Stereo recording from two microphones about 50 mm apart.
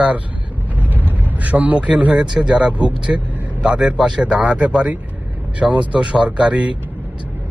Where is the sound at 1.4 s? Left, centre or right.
Right.